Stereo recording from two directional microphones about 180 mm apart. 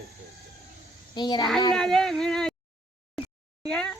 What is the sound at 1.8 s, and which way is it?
Speech, 5° left (ahead or behind).